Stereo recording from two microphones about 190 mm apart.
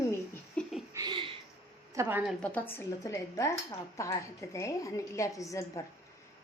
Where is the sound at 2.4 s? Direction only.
10° left (ahead or behind).